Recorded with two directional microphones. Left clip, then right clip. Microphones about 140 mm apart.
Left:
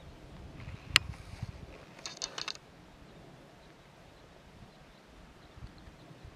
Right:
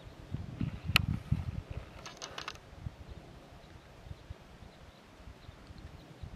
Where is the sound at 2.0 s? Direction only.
5° right (ahead or behind).